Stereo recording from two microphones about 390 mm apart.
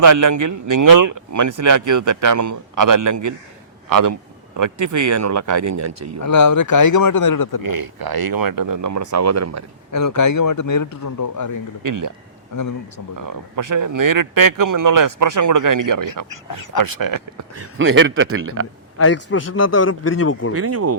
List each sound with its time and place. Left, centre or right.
0.0 s speech: right
6.2 s speech: left
7.6 s speech: right
9.9 s speech: left
11.8 s speech: right
13.1 s speech: right
17.5 s a man's voice: right
18.9 s a man's voice: left
20.6 s a man's voice: right